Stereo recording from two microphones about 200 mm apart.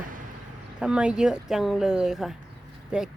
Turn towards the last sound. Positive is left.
turn(degrees=-5)  # may be behind; listen again after turning